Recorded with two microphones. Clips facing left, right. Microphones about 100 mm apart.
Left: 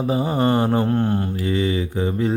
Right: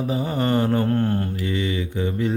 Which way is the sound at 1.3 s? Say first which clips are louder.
Left 4 dB; 35° left (ahead or behind).